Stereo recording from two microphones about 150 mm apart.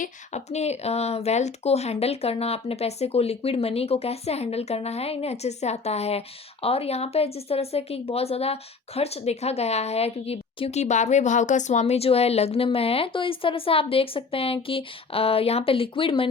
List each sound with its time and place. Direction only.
0.0 s a woman's voice: 50° left (ahead or behind)